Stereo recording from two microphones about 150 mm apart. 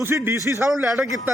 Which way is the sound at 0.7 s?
Centre (ahead or behind).